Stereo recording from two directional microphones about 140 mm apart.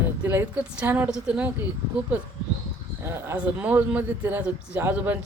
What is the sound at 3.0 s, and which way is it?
A man's voice, 20° right (ahead or behind).